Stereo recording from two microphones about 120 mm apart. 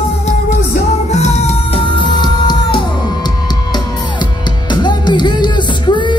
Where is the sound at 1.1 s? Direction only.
65° left (ahead or behind).